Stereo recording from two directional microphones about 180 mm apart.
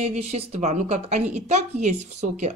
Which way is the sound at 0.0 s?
35° right (ahead or behind).